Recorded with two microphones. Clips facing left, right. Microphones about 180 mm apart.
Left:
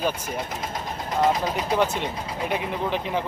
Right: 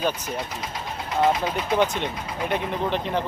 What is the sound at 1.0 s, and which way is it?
Speech, 40° left (ahead or behind).